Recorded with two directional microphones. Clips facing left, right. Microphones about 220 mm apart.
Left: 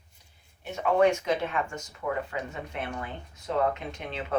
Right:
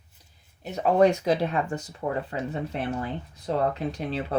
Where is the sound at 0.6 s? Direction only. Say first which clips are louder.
Right 3 dB; 35° right (ahead or behind).